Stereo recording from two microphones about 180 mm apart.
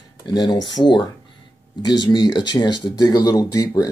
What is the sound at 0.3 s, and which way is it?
Speech, 25° left (ahead or behind).